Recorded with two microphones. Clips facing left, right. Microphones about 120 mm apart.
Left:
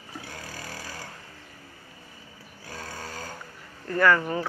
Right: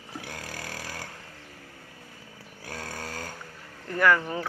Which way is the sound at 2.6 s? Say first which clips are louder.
Right 1 dB; 65° right (ahead or behind).